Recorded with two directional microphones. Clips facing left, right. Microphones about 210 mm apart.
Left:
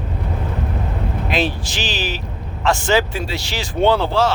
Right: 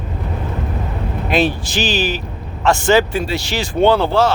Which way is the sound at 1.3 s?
50° right (ahead or behind).